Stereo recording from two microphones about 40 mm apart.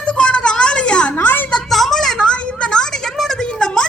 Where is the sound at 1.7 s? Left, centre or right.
Centre.